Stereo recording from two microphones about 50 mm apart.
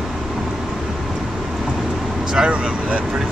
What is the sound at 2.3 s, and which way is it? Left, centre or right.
Speech, centre.